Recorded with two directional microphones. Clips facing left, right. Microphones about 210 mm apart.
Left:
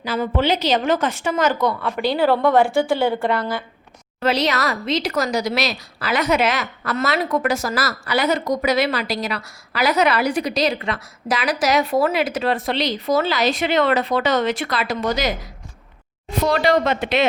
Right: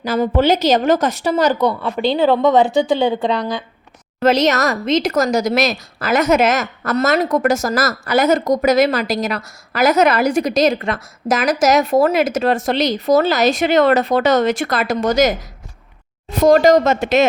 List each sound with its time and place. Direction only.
0.0 s a woman's voice: 45° right (ahead or behind); by 3.6 s 20° right (ahead or behind)
4.2 s a woman's voice: 45° right (ahead or behind)
16.5 s a woman's voice: 45° right (ahead or behind)